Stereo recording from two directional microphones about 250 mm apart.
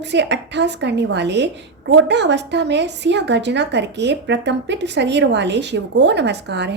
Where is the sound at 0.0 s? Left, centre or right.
Right.